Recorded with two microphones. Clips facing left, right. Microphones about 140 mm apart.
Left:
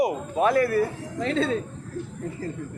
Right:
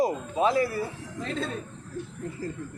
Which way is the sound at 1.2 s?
85° left.